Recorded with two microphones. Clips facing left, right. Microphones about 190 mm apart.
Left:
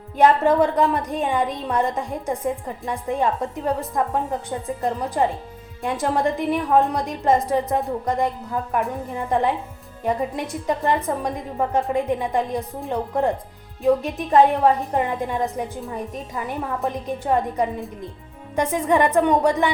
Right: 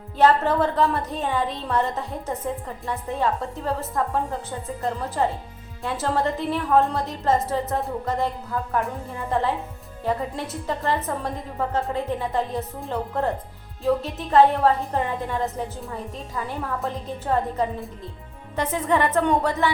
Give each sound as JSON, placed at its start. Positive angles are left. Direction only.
{"t": 0.2, "sound": "a woman's voice", "side_deg": 15}